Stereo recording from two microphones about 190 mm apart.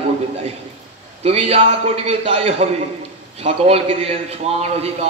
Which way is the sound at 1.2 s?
35° right (ahead or behind).